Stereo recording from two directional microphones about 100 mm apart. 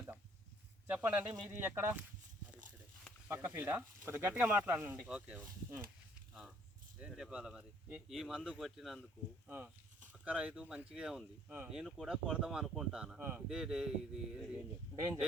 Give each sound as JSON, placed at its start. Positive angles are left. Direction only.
{"t": 0.9, "sound": "speech", "side_deg": -15}
{"t": 3.4, "sound": "speech", "side_deg": -20}
{"t": 7.1, "sound": "speech", "side_deg": -5}
{"t": 9.5, "sound": "speech", "side_deg": -15}